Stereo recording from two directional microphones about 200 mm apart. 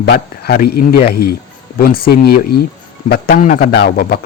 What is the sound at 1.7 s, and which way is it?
A man's voice, 50° left (ahead or behind).